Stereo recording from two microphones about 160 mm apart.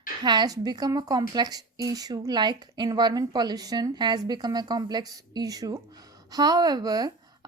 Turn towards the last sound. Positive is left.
turn(degrees=-25)  # may be behind; listen again after turning